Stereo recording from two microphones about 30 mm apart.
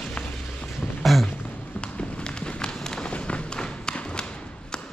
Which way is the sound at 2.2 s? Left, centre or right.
Left.